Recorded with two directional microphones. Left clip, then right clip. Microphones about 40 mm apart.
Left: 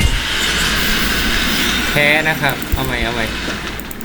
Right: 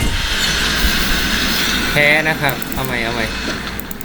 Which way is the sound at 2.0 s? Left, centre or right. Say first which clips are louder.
Right 1 dB; centre.